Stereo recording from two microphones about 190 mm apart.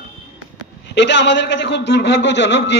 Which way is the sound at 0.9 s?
65° left (ahead or behind).